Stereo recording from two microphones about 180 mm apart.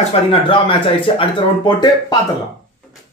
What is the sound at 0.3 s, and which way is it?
Speech, 30° left (ahead or behind).